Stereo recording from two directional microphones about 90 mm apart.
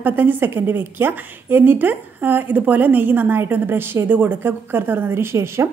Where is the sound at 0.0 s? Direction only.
20° right (ahead or behind).